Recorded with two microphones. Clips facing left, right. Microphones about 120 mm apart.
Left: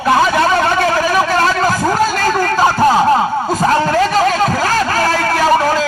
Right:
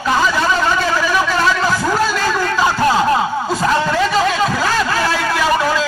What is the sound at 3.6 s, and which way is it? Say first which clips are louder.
Vehicle: left 3 dB; 40° left (ahead or behind).